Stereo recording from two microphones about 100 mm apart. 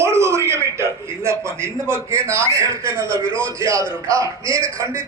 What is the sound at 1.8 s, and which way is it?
A man's voice, 25° right (ahead or behind).